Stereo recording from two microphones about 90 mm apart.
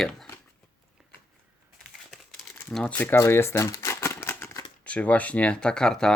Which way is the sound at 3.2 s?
30° left (ahead or behind).